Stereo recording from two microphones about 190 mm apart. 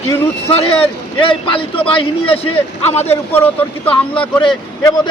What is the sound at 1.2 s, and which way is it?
A man's voice, 25° left (ahead or behind).